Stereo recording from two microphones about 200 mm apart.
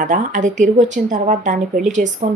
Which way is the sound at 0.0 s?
40° right (ahead or behind).